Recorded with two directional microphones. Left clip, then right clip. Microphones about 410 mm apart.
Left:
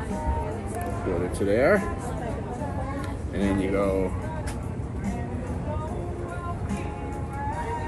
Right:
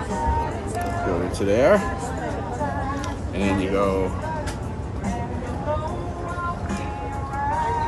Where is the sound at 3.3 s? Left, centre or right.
Right.